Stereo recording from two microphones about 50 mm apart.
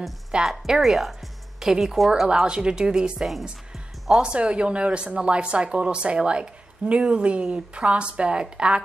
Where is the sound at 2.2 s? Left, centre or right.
Centre.